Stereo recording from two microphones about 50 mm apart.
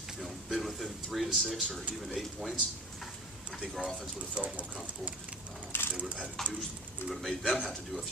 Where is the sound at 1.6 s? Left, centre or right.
Centre.